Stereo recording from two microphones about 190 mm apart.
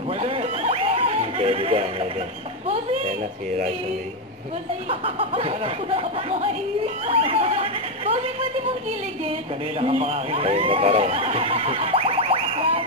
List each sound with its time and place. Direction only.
0.2 s a sound: 30° right (ahead or behind)
2.7 s speech: 40° right (ahead or behind)
4.8 s speech: 30° right (ahead or behind)
9.8 s speech: 30° right (ahead or behind)